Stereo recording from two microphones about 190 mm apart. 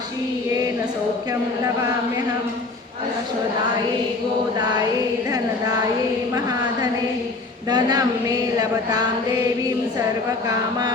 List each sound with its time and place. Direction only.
7.7 s a woman's voice: 20° right (ahead or behind)